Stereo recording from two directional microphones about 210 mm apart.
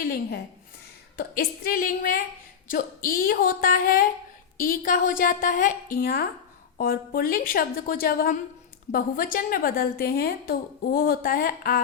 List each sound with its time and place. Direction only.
0.0 s a woman's voice: 45° left (ahead or behind)